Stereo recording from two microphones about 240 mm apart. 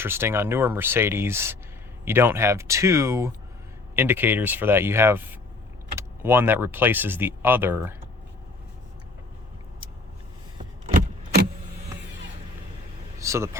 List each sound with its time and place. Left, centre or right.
0.0 s speech: centre
10.8 s a sound: right
13.1 s speech: centre